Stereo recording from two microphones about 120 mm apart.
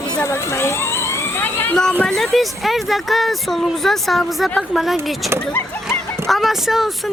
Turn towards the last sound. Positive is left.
turn(degrees=0)  # may be behind; listen again after turning